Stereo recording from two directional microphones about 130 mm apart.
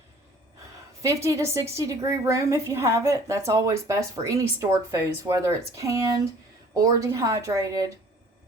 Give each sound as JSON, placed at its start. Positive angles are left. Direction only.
{"t": 1.0, "sound": "a woman's voice", "side_deg": -20}